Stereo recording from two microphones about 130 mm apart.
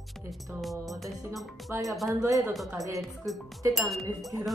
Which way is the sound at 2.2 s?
20° right (ahead or behind).